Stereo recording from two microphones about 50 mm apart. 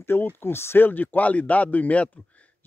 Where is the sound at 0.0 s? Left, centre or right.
Left.